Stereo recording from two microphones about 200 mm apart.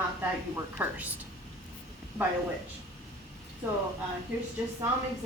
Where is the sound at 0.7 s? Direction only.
10° right (ahead or behind).